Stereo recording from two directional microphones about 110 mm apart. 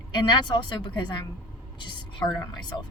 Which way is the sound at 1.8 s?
45° left (ahead or behind).